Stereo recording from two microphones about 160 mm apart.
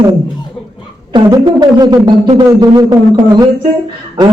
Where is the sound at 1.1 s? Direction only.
30° right (ahead or behind).